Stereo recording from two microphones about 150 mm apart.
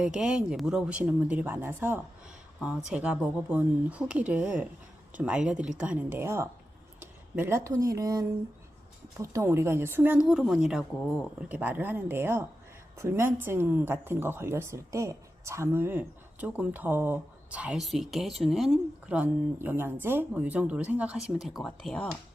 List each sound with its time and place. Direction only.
0.0 s speech: 5° right (ahead or behind)